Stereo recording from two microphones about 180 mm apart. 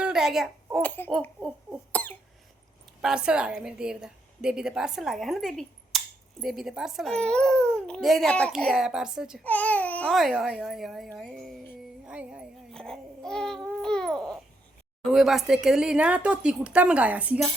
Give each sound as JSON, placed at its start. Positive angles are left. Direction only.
{"t": 0.0, "sound": "a child's voice", "side_deg": -5}
{"t": 1.9, "sound": "cough", "side_deg": 10}
{"t": 3.0, "sound": "a woman's voice", "side_deg": -5}
{"t": 9.4, "sound": "a woman's voice", "side_deg": 10}
{"t": 11.2, "sound": "music", "side_deg": 0}
{"t": 12.0, "sound": "speech", "side_deg": -5}